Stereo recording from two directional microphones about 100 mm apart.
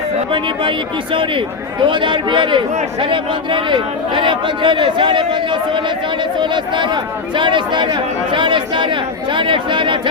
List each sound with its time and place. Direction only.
0.3 s a man's voice: 55° right (ahead or behind)